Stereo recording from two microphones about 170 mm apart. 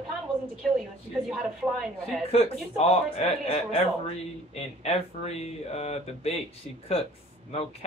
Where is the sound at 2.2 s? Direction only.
35° left (ahead or behind).